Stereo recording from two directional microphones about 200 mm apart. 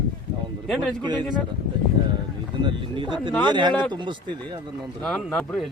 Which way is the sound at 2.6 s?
25° right (ahead or behind).